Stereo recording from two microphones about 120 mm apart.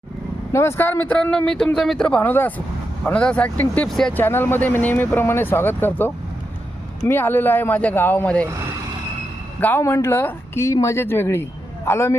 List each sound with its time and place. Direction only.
0.5 s speech: 20° left (ahead or behind); by 4.1 s 5° left (ahead or behind)
4.1 s speech: 15° left (ahead or behind)
9.6 s speech: 15° left (ahead or behind)